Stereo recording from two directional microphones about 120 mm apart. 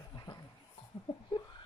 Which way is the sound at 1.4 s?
40° left (ahead or behind).